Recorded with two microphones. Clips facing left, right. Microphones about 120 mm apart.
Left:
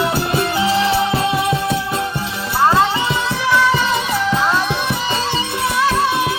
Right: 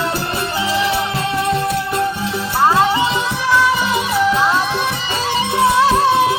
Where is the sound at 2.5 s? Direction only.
5° right (ahead or behind).